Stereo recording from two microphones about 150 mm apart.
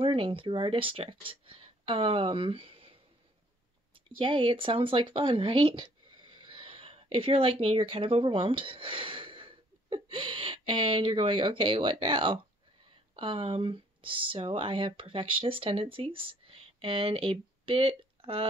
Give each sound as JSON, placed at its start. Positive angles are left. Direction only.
{"t": 0.0, "sound": "speech", "side_deg": -35}